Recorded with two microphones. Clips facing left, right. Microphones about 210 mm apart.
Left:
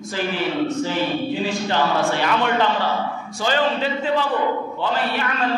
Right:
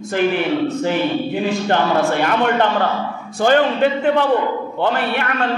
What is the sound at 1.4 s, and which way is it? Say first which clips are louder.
A man's voice: right 4 dB; 60° right (ahead or behind).